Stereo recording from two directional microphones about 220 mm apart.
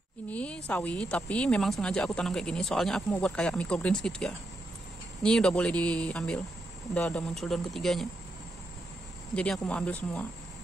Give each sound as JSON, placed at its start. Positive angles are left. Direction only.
{"t": 0.3, "sound": "speech", "side_deg": 5}
{"t": 9.3, "sound": "speech", "side_deg": 5}